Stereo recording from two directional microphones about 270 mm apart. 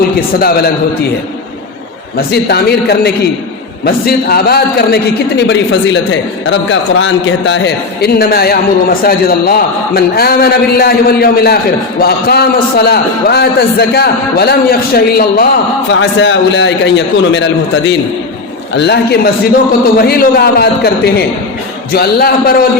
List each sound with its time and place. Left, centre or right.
0.3 s a man's voice: left
2.1 s a man's voice: left